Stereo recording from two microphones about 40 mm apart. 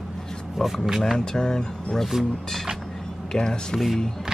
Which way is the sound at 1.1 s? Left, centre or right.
Centre.